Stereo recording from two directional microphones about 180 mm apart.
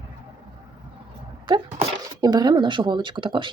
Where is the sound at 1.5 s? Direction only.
25° right (ahead or behind).